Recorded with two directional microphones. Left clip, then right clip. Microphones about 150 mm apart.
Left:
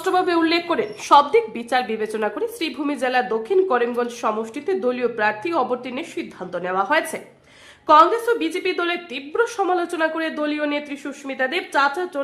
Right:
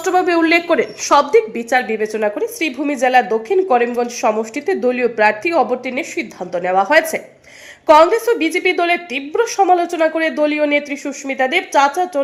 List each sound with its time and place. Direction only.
0.0 s a woman's voice: 15° right (ahead or behind)